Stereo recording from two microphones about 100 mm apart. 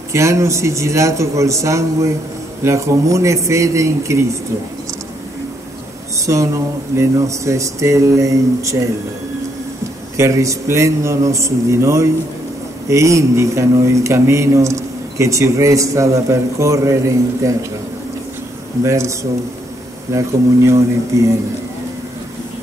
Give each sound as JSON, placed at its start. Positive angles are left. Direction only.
{"t": 0.1, "sound": "a man's voice", "side_deg": -30}
{"t": 6.1, "sound": "a man's voice", "side_deg": -30}
{"t": 10.1, "sound": "a man's voice", "side_deg": -30}
{"t": 18.8, "sound": "a man's voice", "side_deg": -30}